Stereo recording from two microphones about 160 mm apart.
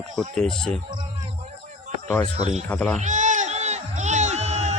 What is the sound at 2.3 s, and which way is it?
Speech, 40° right (ahead or behind).